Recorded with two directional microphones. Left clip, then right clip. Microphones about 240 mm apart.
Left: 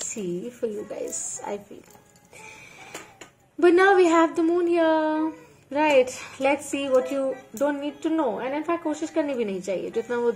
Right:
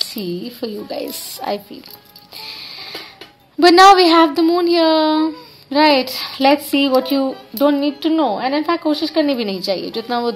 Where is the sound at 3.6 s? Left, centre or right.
Right.